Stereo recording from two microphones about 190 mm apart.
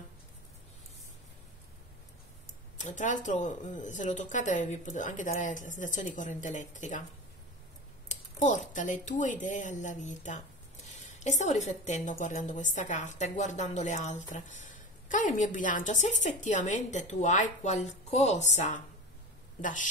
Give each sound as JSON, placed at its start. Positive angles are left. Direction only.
{"t": 2.8, "sound": "a woman's voice", "side_deg": 40}
{"t": 8.1, "sound": "a woman's voice", "side_deg": 40}